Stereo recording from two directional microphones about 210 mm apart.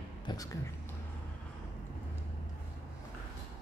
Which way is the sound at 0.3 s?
20° left (ahead or behind).